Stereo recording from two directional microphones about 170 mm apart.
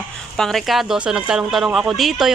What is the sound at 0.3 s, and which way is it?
Speech, centre (ahead or behind).